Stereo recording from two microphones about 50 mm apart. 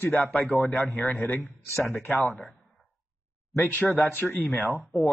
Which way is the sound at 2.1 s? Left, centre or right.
Left.